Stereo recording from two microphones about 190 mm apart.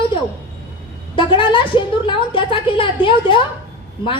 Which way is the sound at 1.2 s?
25° left (ahead or behind).